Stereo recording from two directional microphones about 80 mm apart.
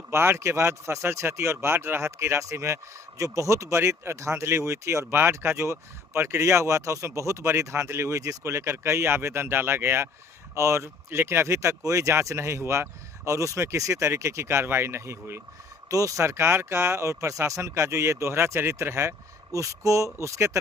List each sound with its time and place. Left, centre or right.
0.1 s speech: right
15.9 s speech: right